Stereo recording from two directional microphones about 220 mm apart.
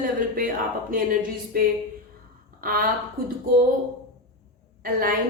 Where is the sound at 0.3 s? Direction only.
40° right (ahead or behind).